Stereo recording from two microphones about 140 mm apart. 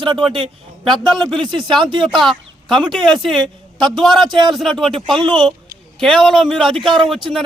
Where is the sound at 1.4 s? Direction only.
35° right (ahead or behind).